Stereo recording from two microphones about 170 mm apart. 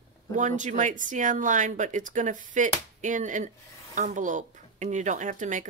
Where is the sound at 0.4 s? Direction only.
45° right (ahead or behind).